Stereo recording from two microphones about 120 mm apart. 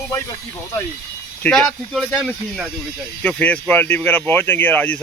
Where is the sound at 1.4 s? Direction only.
5° left (ahead or behind).